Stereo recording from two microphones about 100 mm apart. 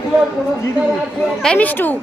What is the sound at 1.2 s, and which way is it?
Speech, 5° left (ahead or behind).